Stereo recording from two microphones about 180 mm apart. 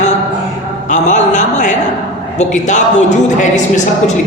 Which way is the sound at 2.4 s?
40° left (ahead or behind).